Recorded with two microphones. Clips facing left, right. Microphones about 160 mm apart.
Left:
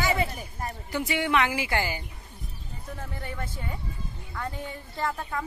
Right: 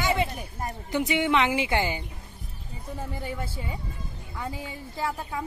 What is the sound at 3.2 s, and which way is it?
A woman's voice, 10° right (ahead or behind).